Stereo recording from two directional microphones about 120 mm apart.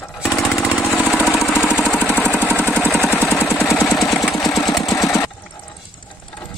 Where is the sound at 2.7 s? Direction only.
15° left (ahead or behind).